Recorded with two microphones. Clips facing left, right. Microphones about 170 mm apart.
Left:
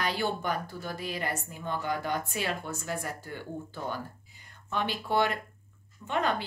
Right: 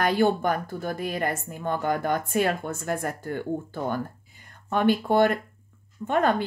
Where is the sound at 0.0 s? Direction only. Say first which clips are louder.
Right 9 dB; 50° right (ahead or behind).